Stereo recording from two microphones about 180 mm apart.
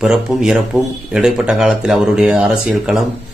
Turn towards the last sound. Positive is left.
turn(degrees=-5)  # may be behind; listen again after turning